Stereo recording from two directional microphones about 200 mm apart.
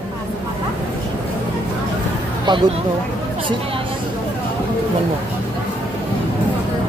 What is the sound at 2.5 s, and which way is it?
Speech, 20° right (ahead or behind).